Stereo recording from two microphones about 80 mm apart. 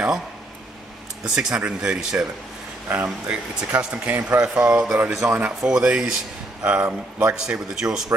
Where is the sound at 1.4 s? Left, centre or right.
Centre.